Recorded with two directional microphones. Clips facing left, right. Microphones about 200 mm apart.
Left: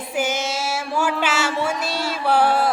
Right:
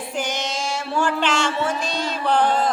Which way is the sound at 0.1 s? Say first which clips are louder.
Left 4 dB; 5° left (ahead or behind).